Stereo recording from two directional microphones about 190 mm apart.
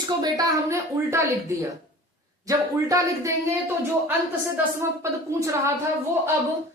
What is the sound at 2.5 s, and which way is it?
Speech, 15° right (ahead or behind).